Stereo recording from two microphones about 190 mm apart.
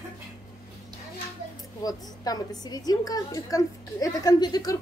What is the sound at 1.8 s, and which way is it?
A woman's voice, 20° left (ahead or behind).